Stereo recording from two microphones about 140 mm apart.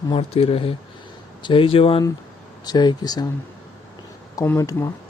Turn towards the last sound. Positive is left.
turn(degrees=25)  # may be behind; listen again after turning